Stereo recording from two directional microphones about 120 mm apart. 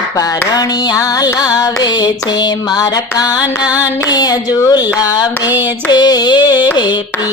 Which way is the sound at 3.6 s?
10° right (ahead or behind).